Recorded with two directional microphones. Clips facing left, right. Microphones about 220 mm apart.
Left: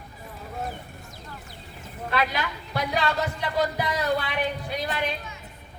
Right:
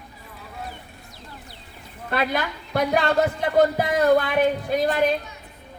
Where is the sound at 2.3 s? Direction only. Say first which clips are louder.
Right 5 dB; 50° right (ahead or behind).